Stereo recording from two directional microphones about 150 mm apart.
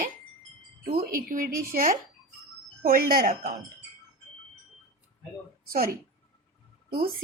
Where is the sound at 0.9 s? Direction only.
75° right (ahead or behind).